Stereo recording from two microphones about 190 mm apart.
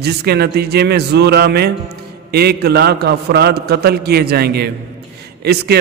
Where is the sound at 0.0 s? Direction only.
60° right (ahead or behind).